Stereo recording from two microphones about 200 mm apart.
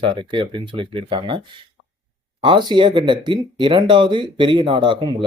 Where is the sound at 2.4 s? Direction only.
25° right (ahead or behind).